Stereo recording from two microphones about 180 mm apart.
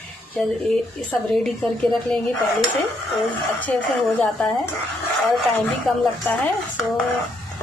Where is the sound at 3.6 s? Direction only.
10° left (ahead or behind).